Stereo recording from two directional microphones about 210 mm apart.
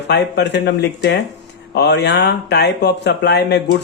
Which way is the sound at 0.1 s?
55° left (ahead or behind).